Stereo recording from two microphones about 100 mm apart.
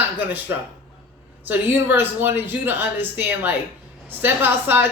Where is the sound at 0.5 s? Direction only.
25° right (ahead or behind).